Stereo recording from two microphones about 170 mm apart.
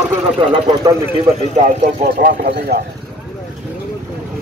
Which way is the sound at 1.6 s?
45° right (ahead or behind).